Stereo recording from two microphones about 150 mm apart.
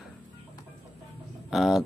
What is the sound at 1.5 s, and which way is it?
Speech, 5° right (ahead or behind).